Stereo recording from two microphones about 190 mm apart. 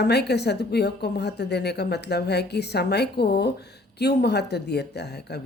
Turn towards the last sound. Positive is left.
turn(degrees=60)  # may be behind; listen again after turning